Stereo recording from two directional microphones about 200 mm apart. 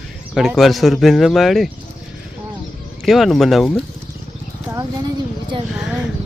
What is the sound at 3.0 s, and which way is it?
Speech, centre (ahead or behind).